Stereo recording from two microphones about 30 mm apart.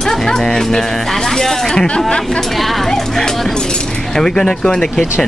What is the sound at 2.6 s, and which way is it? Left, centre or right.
Speech, centre.